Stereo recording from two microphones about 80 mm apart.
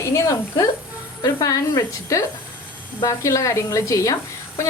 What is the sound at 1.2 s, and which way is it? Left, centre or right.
A woman's voice, left.